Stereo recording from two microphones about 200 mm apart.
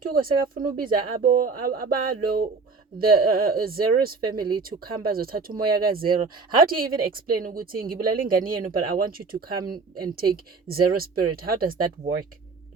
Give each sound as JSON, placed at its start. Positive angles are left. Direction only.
{"t": 0.0, "sound": "speech", "side_deg": -45}